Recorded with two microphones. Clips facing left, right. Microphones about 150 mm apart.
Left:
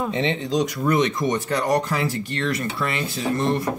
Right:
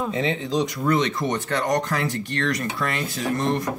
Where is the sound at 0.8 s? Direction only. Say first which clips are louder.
Left 2 dB; 15° left (ahead or behind).